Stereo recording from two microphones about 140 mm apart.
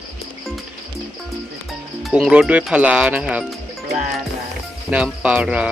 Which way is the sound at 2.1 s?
5° right (ahead or behind).